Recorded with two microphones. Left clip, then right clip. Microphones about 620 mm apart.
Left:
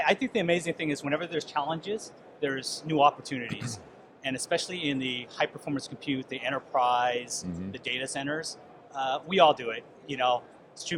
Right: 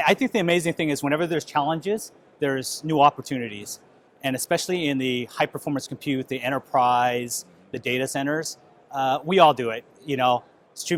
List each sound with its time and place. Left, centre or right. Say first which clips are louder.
0.0 s speech: right 5 dB; right